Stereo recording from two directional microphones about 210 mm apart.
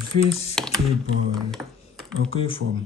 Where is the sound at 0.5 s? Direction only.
Centre (ahead or behind).